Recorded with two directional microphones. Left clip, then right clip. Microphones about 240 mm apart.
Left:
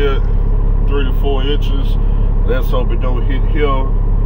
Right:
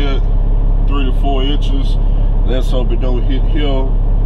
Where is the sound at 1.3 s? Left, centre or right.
Centre.